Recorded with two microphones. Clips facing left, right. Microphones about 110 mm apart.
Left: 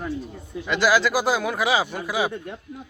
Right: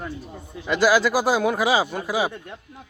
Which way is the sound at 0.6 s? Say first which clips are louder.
Right 2 dB; 15° right (ahead or behind).